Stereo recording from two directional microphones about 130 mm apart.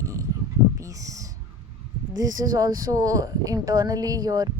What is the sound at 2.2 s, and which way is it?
Speech, 25° right (ahead or behind).